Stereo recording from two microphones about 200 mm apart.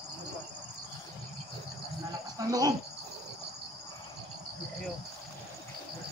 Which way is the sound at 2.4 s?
20° right (ahead or behind).